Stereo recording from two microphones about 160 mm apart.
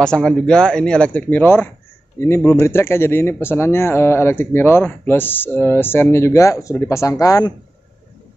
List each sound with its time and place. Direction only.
0.0 s speech: 5° left (ahead or behind); by 7.5 s 20° left (ahead or behind)